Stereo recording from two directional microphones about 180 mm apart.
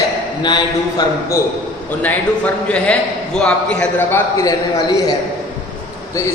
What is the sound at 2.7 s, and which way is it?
A man's voice, 5° left (ahead or behind).